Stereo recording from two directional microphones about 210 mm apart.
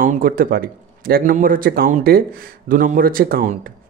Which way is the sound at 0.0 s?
40° right (ahead or behind).